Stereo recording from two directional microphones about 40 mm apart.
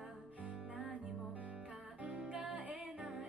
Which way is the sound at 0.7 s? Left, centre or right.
Right.